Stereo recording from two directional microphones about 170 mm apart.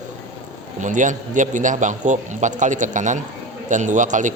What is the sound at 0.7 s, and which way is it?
A man's voice, 45° right (ahead or behind).